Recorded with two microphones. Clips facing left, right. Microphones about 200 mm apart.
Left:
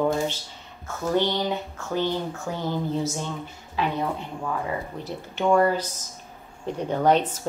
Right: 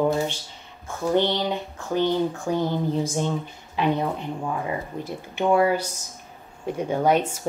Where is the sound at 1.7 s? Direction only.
15° right (ahead or behind).